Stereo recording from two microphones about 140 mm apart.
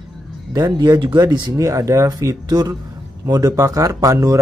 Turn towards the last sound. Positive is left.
turn(degrees=-25)  # may be behind; listen again after turning